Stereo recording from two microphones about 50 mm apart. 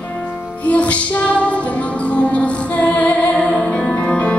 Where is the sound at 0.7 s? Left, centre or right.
Left.